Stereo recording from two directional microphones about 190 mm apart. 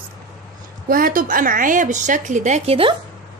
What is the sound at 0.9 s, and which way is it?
A woman's voice, 45° right (ahead or behind).